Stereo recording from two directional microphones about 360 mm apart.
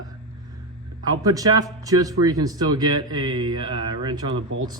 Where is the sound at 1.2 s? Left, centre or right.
Centre.